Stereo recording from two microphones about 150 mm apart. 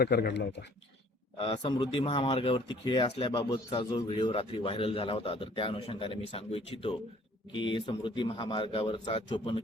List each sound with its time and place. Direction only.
0.0 s speech: 90° left
1.4 s a man's voice: 40° left (ahead or behind)